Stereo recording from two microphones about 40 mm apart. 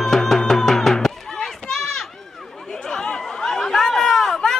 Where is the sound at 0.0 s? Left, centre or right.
Centre.